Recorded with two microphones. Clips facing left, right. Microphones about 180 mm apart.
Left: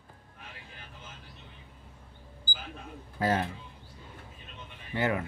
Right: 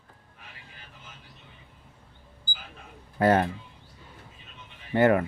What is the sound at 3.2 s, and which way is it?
Speech, 60° right (ahead or behind).